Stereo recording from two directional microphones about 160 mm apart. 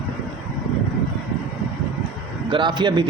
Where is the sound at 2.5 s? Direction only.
30° right (ahead or behind).